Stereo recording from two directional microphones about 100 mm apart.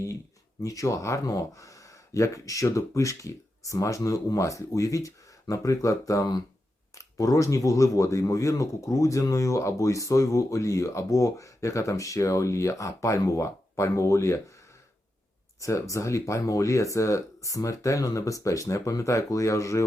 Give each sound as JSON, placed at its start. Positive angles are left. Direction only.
{"t": 0.6, "sound": "speech", "side_deg": 35}
{"t": 15.6, "sound": "speech", "side_deg": 35}